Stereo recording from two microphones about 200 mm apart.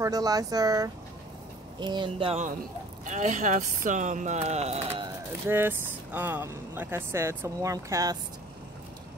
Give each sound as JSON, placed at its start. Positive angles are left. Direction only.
{"t": 0.0, "sound": "speech", "side_deg": -20}
{"t": 5.5, "sound": "speech", "side_deg": -10}